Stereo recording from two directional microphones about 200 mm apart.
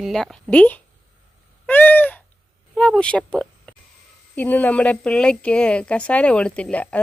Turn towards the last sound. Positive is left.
turn(degrees=5)  # may be behind; listen again after turning